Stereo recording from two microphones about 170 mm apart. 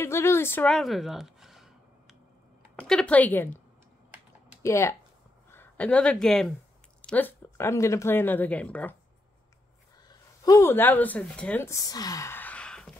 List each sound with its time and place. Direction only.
0.0 s speech: 15° left (ahead or behind); by 1.7 s centre (ahead or behind)
2.9 s speech: 5° left (ahead or behind)
4.6 s speech: 15° left (ahead or behind)
10.0 s speech: 20° left (ahead or behind); by 12.9 s 5° left (ahead or behind)